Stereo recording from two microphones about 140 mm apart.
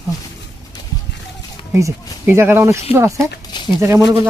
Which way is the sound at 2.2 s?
15° right (ahead or behind).